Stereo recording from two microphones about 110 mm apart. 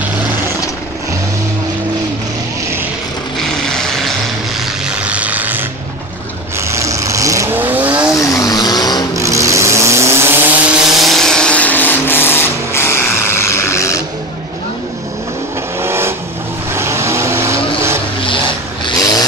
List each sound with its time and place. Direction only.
0.0 s vehicle: 20° right (ahead or behind)
3.3 s vehicle: 5° left (ahead or behind)
4.6 s music: 10° right (ahead or behind)
6.6 s vehicle: 25° right (ahead or behind)
7.5 s vehicle: 15° right (ahead or behind)
8.3 s vehicle: 35° left (ahead or behind)
9.1 s vehicle: 30° right (ahead or behind); by 14.0 s 25° left (ahead or behind)
15.8 s vehicle: 20° right (ahead or behind)
18.2 s vehicle: 50° left (ahead or behind)
18.9 s vehicle: 35° left (ahead or behind)